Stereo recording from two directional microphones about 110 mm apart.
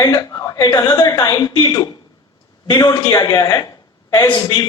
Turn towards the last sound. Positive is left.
turn(degrees=40)  # may be behind; listen again after turning